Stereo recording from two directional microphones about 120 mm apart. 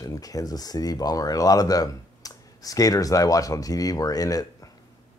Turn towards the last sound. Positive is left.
turn(degrees=30)  # may be behind; listen again after turning